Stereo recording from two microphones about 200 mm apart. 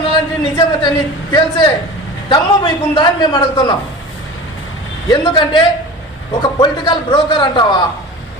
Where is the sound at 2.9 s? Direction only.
20° left (ahead or behind).